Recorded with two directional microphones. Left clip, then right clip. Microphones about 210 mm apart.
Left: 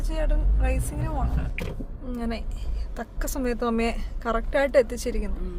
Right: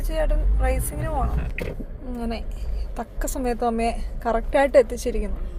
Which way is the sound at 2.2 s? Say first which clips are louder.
Right 2 dB; 5° left (ahead or behind).